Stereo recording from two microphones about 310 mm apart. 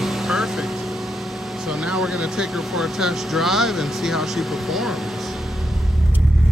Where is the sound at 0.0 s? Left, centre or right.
Centre.